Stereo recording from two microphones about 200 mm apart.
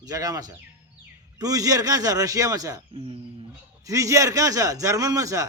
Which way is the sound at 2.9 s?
30° right (ahead or behind).